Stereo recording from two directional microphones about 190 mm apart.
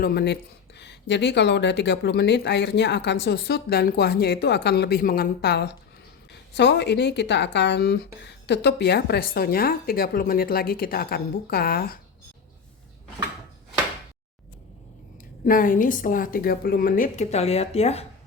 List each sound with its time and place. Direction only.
0.0 s a woman's voice: 55° left (ahead or behind)
15.4 s a woman's voice: 45° left (ahead or behind)